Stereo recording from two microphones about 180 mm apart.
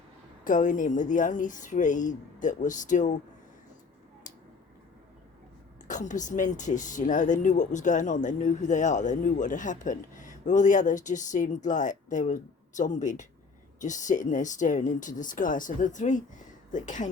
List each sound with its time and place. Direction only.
0.4 s speech: 45° left (ahead or behind)
5.9 s speech: 45° left (ahead or behind)